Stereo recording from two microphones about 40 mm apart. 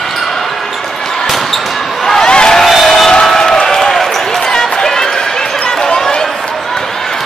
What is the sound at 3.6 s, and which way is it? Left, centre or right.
Basketball bounce, centre.